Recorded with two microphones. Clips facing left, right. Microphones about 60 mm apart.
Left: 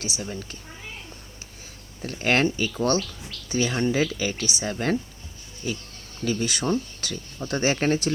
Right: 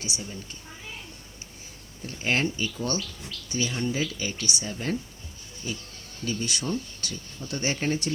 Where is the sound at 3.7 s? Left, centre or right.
Left.